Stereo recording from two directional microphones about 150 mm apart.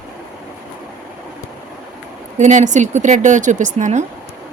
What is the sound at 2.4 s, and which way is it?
Speech, 55° right (ahead or behind).